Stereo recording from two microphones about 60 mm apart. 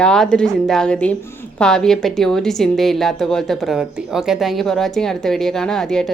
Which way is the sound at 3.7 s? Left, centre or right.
Centre.